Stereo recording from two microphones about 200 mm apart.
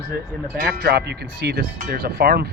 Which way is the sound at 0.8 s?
55° right (ahead or behind).